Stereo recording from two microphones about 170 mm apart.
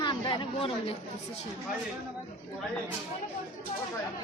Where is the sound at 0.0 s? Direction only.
30° left (ahead or behind).